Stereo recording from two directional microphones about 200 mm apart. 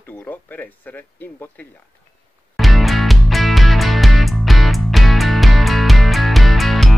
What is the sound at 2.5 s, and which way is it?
Music, centre (ahead or behind).